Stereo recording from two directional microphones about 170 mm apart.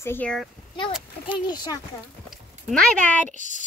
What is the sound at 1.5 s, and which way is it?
Speech, 25° left (ahead or behind).